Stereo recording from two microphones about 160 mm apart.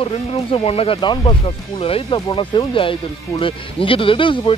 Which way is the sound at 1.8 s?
35° left (ahead or behind).